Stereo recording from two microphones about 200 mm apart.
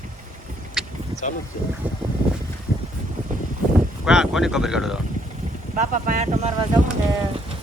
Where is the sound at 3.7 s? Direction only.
5° right (ahead or behind).